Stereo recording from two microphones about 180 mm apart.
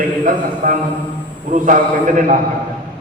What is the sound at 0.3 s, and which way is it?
A man's voice, 45° right (ahead or behind).